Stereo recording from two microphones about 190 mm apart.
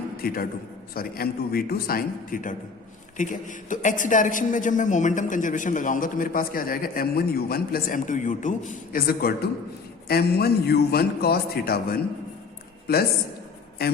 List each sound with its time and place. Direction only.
0.2 s a man's voice: 50° left (ahead or behind)
13.8 s a man's voice: 55° left (ahead or behind)